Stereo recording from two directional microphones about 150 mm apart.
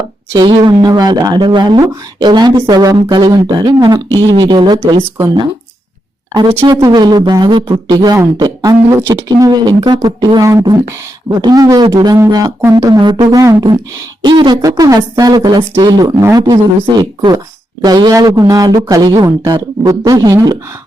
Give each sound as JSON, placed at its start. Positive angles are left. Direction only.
{"t": 0.3, "sound": "speech", "side_deg": -30}
{"t": 6.7, "sound": "speech", "side_deg": -30}